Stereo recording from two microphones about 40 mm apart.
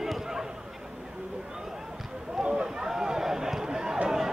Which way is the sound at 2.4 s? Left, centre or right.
Right.